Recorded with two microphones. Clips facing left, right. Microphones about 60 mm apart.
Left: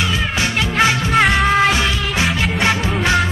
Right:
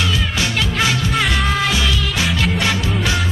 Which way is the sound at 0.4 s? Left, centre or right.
Left.